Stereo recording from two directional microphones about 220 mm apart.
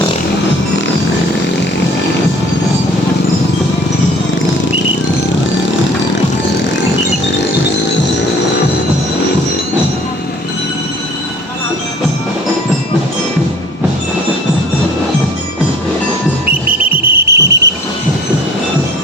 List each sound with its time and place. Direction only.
16.9 s cricket: 50° right (ahead or behind)